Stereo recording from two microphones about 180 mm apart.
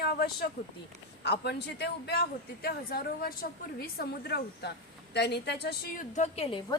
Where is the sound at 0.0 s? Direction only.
60° left (ahead or behind).